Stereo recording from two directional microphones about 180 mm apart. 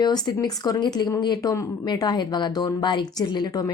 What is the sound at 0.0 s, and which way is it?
A woman's voice, 20° left (ahead or behind).